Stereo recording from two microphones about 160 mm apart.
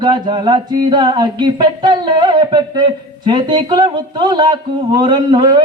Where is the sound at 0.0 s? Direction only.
30° right (ahead or behind).